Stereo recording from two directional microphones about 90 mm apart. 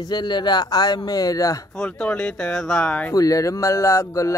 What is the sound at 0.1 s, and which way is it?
Speech, 55° left (ahead or behind).